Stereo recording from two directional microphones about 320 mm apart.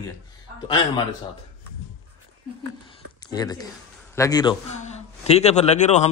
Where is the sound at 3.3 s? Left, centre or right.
Centre.